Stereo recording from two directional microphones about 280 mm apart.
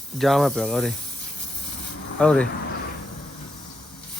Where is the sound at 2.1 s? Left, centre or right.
Centre.